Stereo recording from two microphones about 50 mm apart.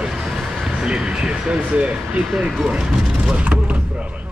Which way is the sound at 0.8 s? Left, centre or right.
Centre.